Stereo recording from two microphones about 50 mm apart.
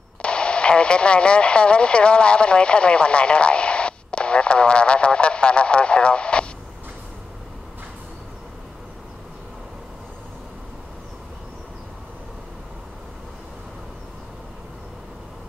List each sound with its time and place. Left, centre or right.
0.2 s speech: left